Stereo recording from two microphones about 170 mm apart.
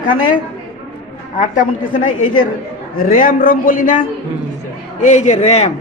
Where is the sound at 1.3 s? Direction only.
50° left (ahead or behind).